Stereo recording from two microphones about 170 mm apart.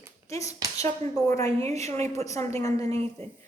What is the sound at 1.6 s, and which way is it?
Speech, 40° right (ahead or behind).